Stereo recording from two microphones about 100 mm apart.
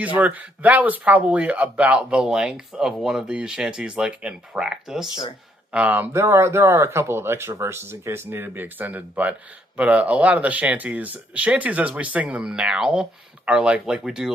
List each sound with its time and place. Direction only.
0.2 s speech: 15° right (ahead or behind)
5.7 s speech: 15° right (ahead or behind)